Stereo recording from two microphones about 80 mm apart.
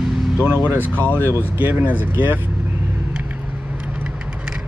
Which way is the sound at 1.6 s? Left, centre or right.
Right.